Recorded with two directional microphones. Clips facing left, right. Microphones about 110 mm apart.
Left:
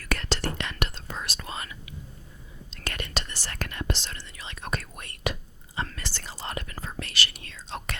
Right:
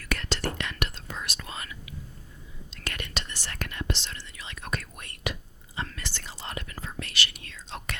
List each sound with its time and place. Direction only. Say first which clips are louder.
0.0 s whispering: left 1 dB; 40° left (ahead or behind)